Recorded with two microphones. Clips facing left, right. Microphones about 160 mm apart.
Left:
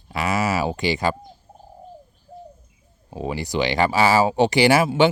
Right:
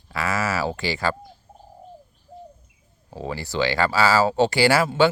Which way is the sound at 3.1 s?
15° left (ahead or behind).